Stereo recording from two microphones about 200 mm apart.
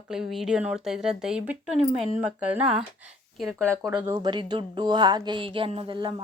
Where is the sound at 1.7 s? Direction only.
30° right (ahead or behind).